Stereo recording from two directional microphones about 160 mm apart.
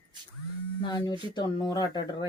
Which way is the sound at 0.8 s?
25° left (ahead or behind).